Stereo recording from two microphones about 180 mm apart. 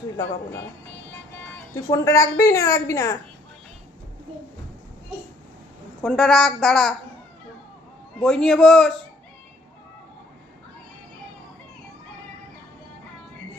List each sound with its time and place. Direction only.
1.5 s speech: 15° left (ahead or behind)
6.0 s a woman's voice: centre (ahead or behind)
8.2 s a woman's voice: centre (ahead or behind)